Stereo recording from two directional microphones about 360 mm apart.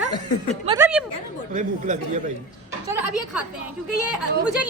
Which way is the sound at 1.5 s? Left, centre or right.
Right.